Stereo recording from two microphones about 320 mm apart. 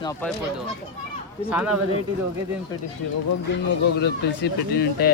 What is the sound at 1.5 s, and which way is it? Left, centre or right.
Speech, centre.